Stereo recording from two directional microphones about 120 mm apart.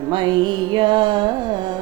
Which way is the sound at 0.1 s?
40° right (ahead or behind).